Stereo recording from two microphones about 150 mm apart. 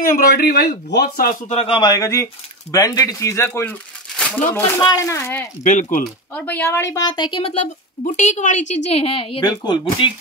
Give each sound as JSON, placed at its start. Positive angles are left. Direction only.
{"t": 0.0, "sound": "speech", "side_deg": 80}
{"t": 1.5, "sound": "a man's voice", "side_deg": 40}
{"t": 1.8, "sound": "speech", "side_deg": 25}
{"t": 5.6, "sound": "speech", "side_deg": 55}
{"t": 6.3, "sound": "speech", "side_deg": 10}
{"t": 7.1, "sound": "a woman's voice", "side_deg": 30}
{"t": 9.4, "sound": "a man's voice", "side_deg": 25}